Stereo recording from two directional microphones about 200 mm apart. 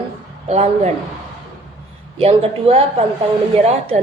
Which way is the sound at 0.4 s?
30° right (ahead or behind).